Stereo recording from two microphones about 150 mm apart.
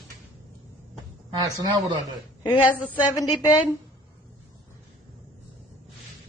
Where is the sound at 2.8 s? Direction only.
10° left (ahead or behind).